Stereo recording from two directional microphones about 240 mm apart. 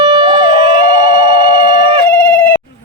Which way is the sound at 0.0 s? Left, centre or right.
Centre.